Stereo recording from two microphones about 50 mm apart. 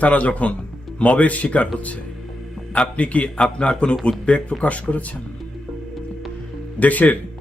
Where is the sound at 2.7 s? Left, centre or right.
Left.